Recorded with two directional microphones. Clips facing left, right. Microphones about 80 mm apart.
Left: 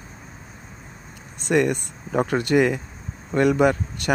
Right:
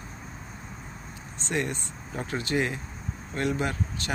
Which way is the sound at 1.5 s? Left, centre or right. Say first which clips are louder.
Left 10 dB; left.